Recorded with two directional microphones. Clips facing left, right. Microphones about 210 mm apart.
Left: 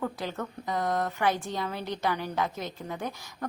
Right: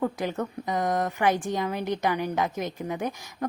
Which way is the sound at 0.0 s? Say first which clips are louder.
Right 5 dB; 15° right (ahead or behind).